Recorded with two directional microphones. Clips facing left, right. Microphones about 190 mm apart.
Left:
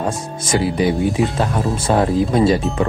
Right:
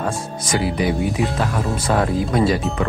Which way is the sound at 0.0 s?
30° left (ahead or behind).